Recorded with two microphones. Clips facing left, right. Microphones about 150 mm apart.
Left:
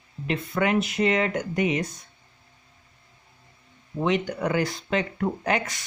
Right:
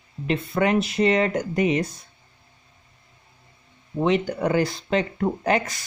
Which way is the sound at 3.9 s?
30° right (ahead or behind).